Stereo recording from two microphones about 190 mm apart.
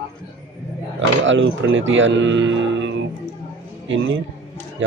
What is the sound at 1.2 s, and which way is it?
A man's voice, 80° right.